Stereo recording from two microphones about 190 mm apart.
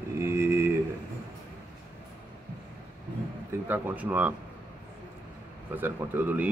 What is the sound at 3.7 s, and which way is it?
Speech, 10° right (ahead or behind).